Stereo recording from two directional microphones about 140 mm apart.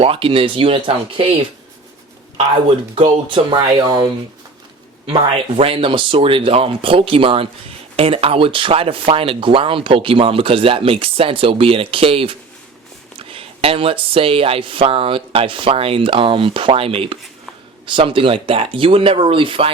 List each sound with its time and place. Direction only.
0.0 s speech: 40° right (ahead or behind)
2.9 s speech: 40° right (ahead or behind)